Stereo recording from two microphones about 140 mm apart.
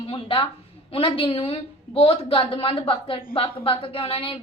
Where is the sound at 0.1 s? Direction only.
40° left (ahead or behind).